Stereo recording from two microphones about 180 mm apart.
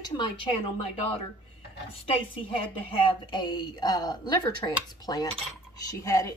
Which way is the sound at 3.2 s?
25° left (ahead or behind).